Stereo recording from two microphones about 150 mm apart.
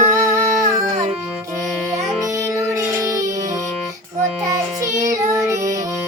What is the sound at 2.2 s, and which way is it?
Music, 20° right (ahead or behind).